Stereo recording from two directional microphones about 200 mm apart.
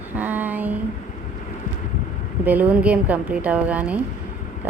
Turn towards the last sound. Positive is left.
turn(degrees=-5)  # may be behind; listen again after turning